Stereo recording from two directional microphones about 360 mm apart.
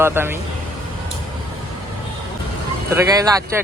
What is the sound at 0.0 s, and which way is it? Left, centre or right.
Speech, centre.